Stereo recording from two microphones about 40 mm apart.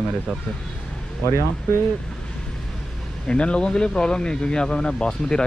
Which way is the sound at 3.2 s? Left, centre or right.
Left.